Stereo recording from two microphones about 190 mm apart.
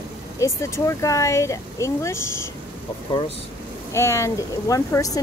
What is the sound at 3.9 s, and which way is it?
Speech, 15° left (ahead or behind).